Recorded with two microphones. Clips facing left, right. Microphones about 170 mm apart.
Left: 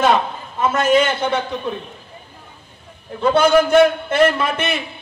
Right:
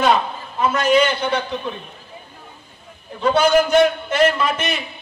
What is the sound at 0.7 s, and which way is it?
Speech, 50° left (ahead or behind).